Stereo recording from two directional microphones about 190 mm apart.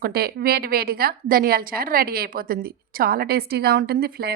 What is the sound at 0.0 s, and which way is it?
A woman's voice, 55° right (ahead or behind).